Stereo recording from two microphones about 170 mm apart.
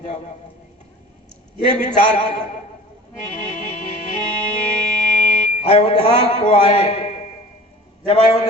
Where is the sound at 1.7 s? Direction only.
45° left (ahead or behind).